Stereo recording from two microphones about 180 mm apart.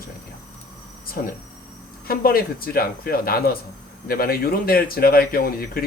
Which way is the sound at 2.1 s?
55° left (ahead or behind).